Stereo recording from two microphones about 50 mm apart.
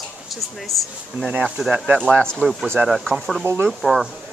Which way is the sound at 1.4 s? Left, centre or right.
Centre.